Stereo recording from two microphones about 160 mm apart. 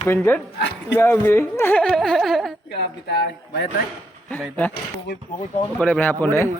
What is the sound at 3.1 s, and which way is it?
Speech, 90° left.